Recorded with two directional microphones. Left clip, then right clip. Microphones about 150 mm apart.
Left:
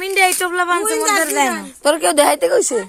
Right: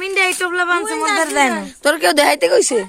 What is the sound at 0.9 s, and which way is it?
Speech, 5° right (ahead or behind).